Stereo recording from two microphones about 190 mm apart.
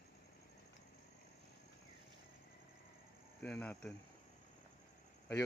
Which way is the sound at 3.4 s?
10° left (ahead or behind).